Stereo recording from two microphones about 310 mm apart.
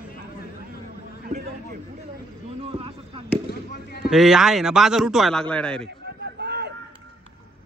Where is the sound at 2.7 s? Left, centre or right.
Centre.